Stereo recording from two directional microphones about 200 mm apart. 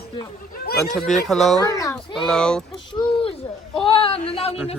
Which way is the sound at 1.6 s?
15° left (ahead or behind).